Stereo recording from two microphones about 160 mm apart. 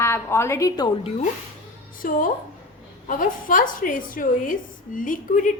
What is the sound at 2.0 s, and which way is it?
A woman's voice, 60° left (ahead or behind).